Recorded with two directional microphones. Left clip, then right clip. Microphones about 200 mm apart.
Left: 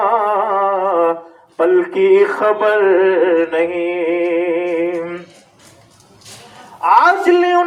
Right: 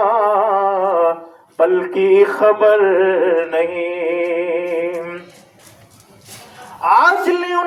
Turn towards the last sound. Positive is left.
turn(degrees=15)  # may be behind; listen again after turning